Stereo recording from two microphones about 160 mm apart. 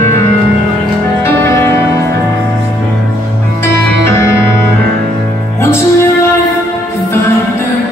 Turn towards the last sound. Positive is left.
turn(degrees=15)  # may be behind; listen again after turning